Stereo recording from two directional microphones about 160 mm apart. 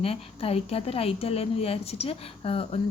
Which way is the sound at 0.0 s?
35° left (ahead or behind).